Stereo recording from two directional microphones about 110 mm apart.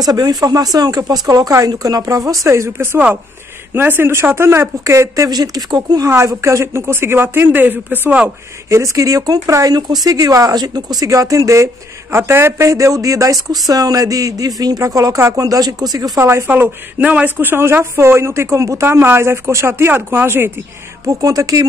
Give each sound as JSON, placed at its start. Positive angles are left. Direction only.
{"t": 0.0, "sound": "speech", "side_deg": -35}
{"t": 6.0, "sound": "speech", "side_deg": -25}
{"t": 8.6, "sound": "speech", "side_deg": -30}
{"t": 16.2, "sound": "speech", "side_deg": -25}